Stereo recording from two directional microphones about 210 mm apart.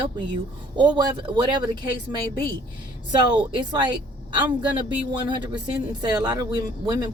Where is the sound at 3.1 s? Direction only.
20° right (ahead or behind).